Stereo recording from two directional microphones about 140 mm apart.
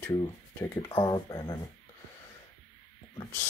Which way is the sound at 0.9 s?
30° left (ahead or behind).